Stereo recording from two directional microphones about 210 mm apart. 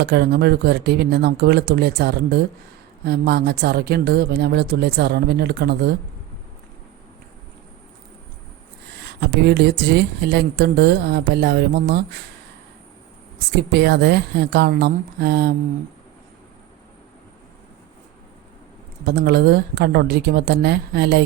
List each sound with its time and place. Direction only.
0.0 s speech: 50° right (ahead or behind)
9.0 s speech: 50° right (ahead or behind)
13.6 s speech: 50° right (ahead or behind)
19.0 s speech: 50° right (ahead or behind)